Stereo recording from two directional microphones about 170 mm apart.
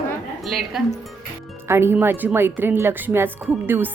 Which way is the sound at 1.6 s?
15° right (ahead or behind).